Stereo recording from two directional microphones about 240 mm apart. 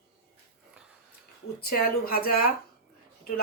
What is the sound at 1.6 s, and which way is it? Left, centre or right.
Speech, left.